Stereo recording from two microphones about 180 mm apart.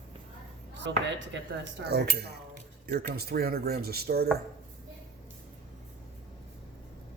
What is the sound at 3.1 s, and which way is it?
Speech, 60° right (ahead or behind).